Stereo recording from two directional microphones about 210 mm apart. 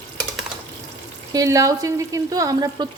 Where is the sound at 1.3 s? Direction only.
15° right (ahead or behind).